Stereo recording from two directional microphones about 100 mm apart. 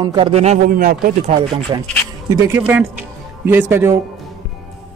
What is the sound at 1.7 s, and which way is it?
Speech, 45° right (ahead or behind).